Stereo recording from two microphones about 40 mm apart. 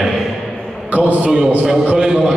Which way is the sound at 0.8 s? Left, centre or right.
Right.